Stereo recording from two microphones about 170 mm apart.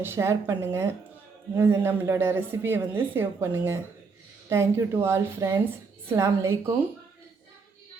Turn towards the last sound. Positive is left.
turn(degrees=-15)  # may be behind; listen again after turning